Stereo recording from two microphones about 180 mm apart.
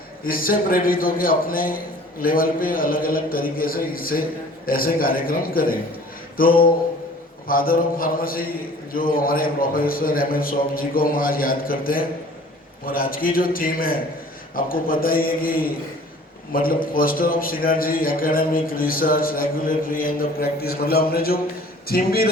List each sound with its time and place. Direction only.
0.3 s a man's voice: 55° left (ahead or behind)